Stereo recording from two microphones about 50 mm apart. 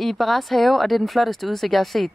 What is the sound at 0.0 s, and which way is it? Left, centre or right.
A woman's voice, centre.